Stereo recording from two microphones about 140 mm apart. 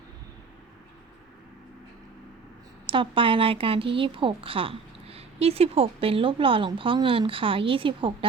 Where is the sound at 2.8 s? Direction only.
40° right (ahead or behind).